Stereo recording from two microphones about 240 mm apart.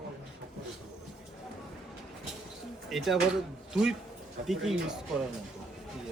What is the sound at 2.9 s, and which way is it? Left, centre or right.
Speech, centre.